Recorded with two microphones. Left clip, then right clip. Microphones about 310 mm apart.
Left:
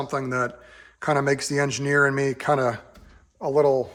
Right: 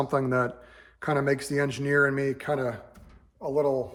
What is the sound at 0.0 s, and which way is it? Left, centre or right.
A man's voice, centre.